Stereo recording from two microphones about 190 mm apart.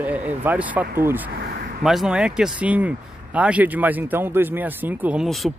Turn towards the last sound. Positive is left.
turn(degrees=0)  # may be behind; listen again after turning